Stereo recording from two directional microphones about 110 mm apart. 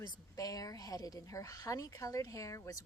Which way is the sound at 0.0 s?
35° left (ahead or behind).